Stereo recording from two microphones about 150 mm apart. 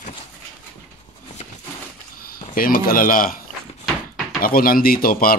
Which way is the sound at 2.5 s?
75° left (ahead or behind).